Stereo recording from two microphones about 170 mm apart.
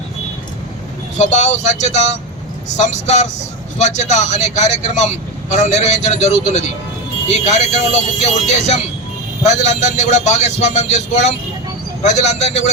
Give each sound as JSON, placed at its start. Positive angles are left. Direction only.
{"t": 1.2, "sound": "speech", "side_deg": 45}